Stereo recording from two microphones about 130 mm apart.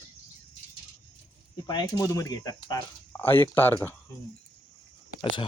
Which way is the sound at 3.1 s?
15° left (ahead or behind).